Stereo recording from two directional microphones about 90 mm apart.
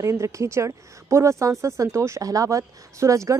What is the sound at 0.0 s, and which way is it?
A woman's voice, 35° right (ahead or behind).